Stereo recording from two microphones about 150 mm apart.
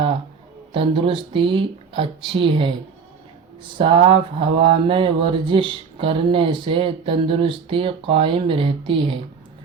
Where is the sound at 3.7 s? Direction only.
35° right (ahead or behind).